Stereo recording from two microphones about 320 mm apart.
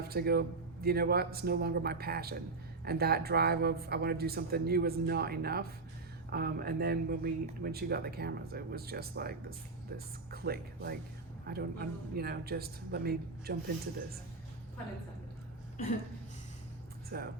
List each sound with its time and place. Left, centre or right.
0.0 s speech: right
17.1 s speech: right